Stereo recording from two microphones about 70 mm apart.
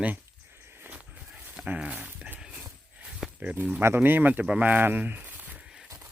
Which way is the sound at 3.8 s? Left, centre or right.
Right.